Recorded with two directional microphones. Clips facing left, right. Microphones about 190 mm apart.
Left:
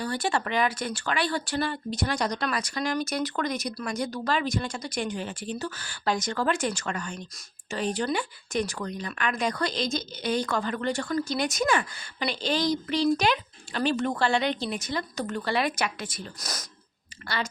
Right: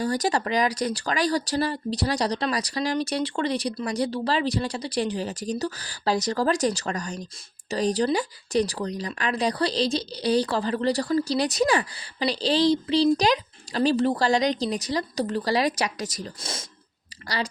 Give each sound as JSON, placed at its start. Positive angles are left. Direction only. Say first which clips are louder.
{"t": 0.0, "sound": "speech", "louder": "right 4 dB", "side_deg": -40}
{"t": 16.4, "sound": "speech", "louder": "right 2 dB", "side_deg": -25}